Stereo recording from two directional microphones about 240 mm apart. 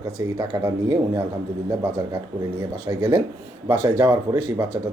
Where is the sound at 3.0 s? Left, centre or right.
Centre.